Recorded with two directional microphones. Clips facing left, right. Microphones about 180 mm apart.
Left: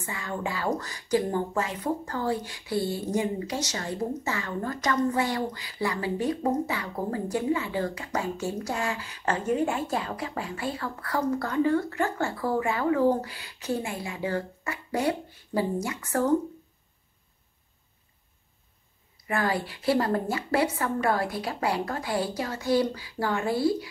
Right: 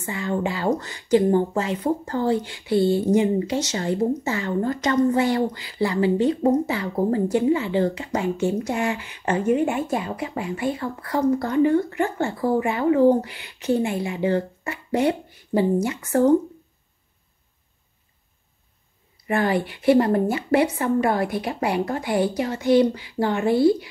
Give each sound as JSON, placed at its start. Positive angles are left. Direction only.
{"t": 0.0, "sound": "speech", "side_deg": -25}
{"t": 19.2, "sound": "speech", "side_deg": -25}